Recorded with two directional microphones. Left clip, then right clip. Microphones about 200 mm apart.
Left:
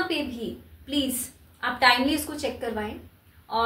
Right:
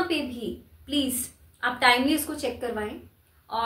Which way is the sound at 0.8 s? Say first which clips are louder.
Even; 15° right (ahead or behind).